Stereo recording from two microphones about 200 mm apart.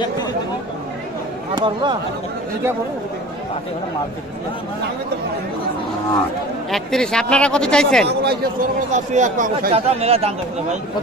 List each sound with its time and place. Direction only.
1.6 s speech: 25° right (ahead or behind)
6.7 s speech: centre (ahead or behind)
8.1 s a man's voice: 55° right (ahead or behind)
8.9 s speech: 35° right (ahead or behind)